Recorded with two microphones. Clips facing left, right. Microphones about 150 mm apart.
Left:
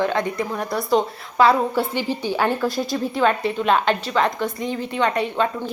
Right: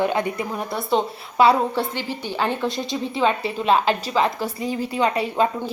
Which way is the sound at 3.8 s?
35° right (ahead or behind).